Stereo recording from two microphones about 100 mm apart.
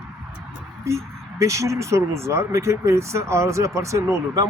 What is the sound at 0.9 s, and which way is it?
Speech, 30° right (ahead or behind).